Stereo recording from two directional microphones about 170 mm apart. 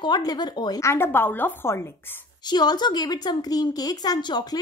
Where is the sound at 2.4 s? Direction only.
25° left (ahead or behind).